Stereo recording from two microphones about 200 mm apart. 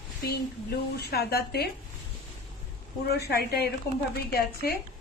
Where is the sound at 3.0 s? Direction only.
55° left (ahead or behind).